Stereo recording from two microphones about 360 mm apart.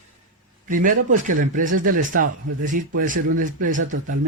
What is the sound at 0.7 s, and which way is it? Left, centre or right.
Speech, right.